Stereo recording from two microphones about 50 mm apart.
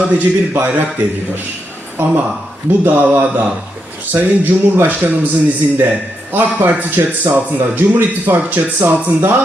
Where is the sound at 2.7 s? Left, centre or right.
Right.